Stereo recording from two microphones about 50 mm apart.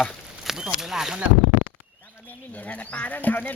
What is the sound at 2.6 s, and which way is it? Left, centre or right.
Speech, left.